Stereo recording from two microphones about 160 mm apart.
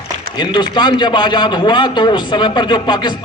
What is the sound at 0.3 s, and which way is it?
A man's voice, 25° left (ahead or behind).